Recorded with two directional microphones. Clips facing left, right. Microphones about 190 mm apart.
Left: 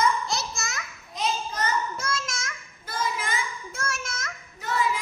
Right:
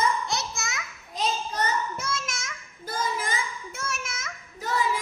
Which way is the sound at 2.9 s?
35° right (ahead or behind).